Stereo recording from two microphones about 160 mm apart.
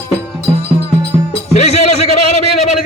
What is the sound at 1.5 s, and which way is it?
Music, 40° left (ahead or behind).